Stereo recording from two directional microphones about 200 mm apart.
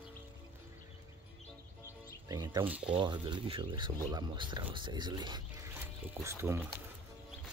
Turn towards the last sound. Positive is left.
turn(degrees=-10)  # may be behind; listen again after turning